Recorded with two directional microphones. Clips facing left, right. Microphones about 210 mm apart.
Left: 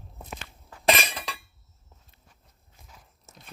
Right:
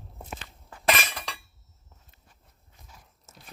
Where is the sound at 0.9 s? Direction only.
20° left (ahead or behind).